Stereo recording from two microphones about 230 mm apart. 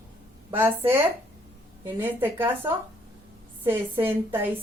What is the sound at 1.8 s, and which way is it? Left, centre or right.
A woman's voice, centre.